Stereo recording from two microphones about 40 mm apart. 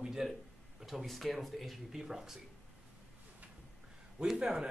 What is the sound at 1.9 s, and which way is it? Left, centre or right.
Speech, centre.